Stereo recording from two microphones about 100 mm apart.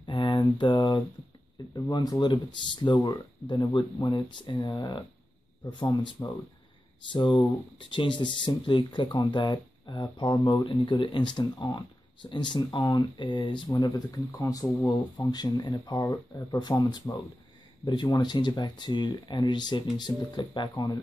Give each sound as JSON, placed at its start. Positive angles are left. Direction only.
{"t": 0.0, "sound": "a sound", "side_deg": 50}
{"t": 1.9, "sound": "speech", "side_deg": 40}
{"t": 4.1, "sound": "speech", "side_deg": 55}
{"t": 6.2, "sound": "speech", "side_deg": 35}
{"t": 7.1, "sound": "speech", "side_deg": 55}
{"t": 18.0, "sound": "speech", "side_deg": 40}